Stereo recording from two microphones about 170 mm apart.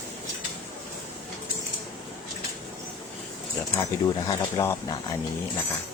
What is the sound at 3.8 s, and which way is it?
Speech, 20° left (ahead or behind).